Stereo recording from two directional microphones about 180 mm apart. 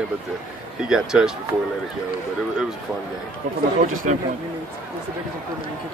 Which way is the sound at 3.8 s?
40° right (ahead or behind).